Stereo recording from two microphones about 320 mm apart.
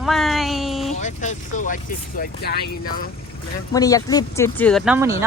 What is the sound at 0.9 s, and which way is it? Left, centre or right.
Speech, left.